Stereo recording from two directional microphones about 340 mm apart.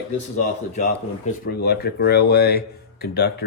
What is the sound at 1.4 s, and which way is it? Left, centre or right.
Speech, left.